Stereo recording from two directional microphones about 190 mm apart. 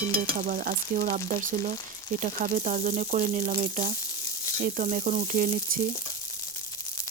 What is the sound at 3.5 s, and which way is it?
Frying, 40° right (ahead or behind).